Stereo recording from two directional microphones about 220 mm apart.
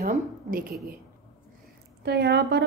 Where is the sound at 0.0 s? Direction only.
40° right (ahead or behind).